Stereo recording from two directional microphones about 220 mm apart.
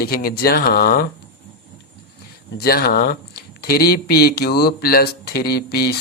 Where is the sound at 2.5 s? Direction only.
45° left (ahead or behind).